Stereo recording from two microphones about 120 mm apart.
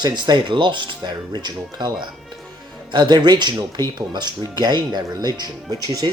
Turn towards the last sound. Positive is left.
turn(degrees=-35)  # may be behind; listen again after turning